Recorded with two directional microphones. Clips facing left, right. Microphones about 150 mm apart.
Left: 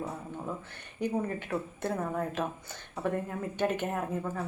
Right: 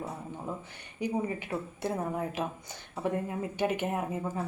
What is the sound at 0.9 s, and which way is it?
Speech, 10° right (ahead or behind).